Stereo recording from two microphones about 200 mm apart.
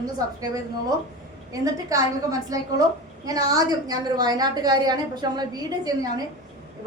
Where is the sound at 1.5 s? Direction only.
15° right (ahead or behind).